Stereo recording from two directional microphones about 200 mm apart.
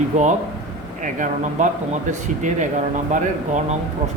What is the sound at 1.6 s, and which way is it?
Speech, 40° right (ahead or behind).